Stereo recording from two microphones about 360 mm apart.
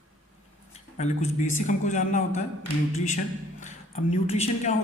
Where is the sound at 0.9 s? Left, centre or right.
Centre.